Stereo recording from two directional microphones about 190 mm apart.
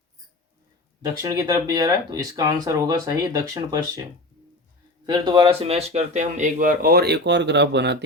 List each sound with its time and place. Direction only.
1.2 s speech: 15° right (ahead or behind)
5.0 s speech: 25° right (ahead or behind); by 8.0 s 65° right (ahead or behind)